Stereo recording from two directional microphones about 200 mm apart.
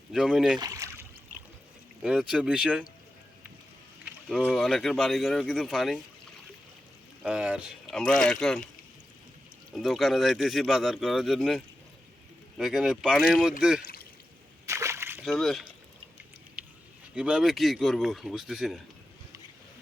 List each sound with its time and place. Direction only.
0.1 s speech: centre (ahead or behind)
0.6 s a sound: 15° right (ahead or behind)
2.0 s speech: centre (ahead or behind)
4.3 s speech: centre (ahead or behind)
7.2 s speech: 5° right (ahead or behind)
9.7 s speech: centre (ahead or behind)
14.7 s splash: 15° right (ahead or behind)
15.2 s speech: centre (ahead or behind)
16.6 s a sound: 10° right (ahead or behind)
17.2 s speech: 5° right (ahead or behind)